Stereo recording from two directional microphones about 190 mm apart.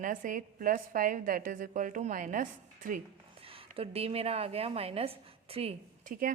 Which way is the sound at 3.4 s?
30° right (ahead or behind).